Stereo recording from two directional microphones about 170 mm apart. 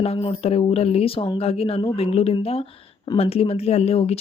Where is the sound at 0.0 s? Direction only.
35° left (ahead or behind).